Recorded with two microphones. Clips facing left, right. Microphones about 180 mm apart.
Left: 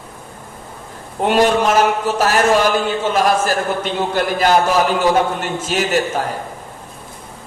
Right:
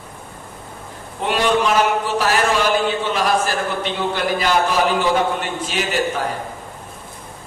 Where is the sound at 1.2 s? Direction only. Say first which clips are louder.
Left 4 dB; 45° left (ahead or behind).